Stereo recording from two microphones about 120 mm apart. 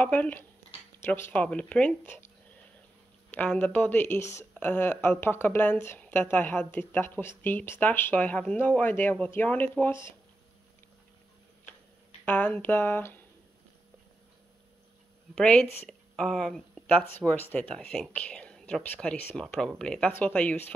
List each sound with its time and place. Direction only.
0.0 s a woman's voice: 10° left (ahead or behind)
3.3 s a woman's voice: 10° left (ahead or behind)
12.3 s a woman's voice: 10° left (ahead or behind)
15.3 s a woman's voice: 10° left (ahead or behind)
15.9 s a sound: 5° left (ahead or behind)
17.2 s a woman's voice: 10° left (ahead or behind)